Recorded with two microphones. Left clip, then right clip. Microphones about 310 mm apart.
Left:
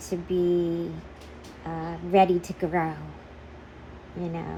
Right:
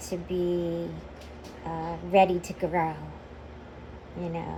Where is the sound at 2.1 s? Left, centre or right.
Left.